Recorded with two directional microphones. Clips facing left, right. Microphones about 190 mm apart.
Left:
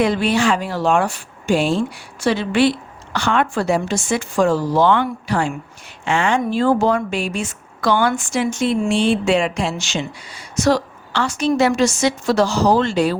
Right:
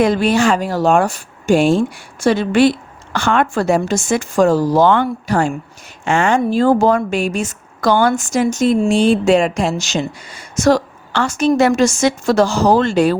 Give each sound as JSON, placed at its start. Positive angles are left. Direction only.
{"t": 0.0, "sound": "a woman's voice", "side_deg": -45}